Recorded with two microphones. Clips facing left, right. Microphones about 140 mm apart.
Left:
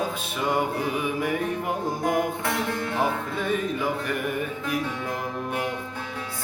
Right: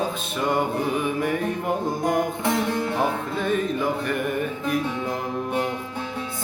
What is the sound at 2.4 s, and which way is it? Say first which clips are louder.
Music: right 4 dB; 25° right (ahead or behind).